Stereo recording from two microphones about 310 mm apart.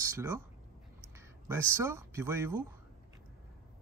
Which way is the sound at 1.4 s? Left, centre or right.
Centre.